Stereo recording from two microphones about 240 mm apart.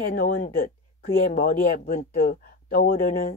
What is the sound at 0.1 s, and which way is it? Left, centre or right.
Speech, left.